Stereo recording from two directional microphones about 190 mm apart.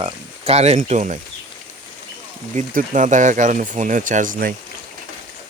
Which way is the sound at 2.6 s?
40° right (ahead or behind).